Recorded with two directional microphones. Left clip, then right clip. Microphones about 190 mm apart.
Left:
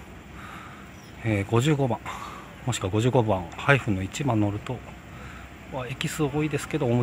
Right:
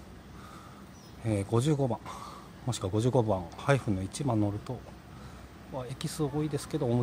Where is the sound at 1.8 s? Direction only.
10° right (ahead or behind).